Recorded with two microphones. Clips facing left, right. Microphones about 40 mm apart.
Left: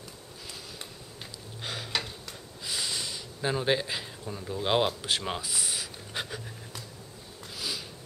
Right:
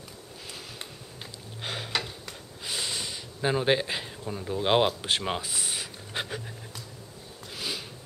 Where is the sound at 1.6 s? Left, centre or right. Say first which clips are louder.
Right 2 dB; centre.